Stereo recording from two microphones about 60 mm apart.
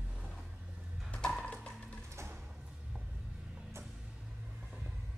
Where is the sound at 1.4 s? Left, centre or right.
Centre.